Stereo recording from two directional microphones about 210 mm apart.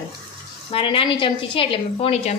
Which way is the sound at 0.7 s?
25° left (ahead or behind).